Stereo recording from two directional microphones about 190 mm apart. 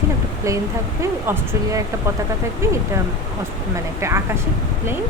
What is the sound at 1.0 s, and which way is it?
Speech, 15° right (ahead or behind).